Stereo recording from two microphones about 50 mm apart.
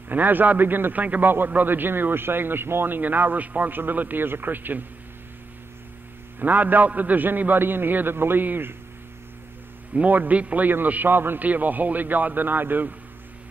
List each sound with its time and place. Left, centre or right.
0.1 s a man's voice: right
1.0 s a man's voice: right
6.4 s a man's voice: right
9.9 s a man's voice: right